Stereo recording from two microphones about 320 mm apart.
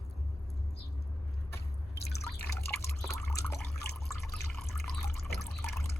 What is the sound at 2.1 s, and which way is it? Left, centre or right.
Drip, left.